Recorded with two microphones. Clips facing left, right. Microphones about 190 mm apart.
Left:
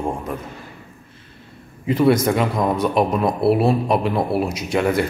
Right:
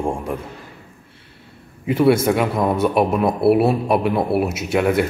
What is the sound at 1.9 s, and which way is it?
Speech, 10° right (ahead or behind).